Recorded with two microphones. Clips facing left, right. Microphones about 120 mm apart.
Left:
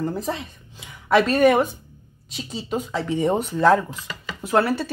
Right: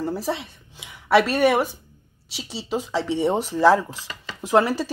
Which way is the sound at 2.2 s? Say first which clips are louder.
Left 2 dB; 85° right.